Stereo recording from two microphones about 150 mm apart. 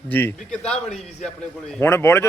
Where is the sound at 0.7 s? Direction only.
45° left (ahead or behind).